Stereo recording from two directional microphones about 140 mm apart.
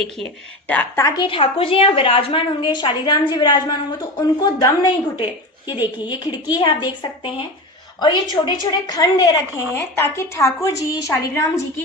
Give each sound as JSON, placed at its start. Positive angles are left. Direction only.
{"t": 0.9, "sound": "a woman's voice", "side_deg": 25}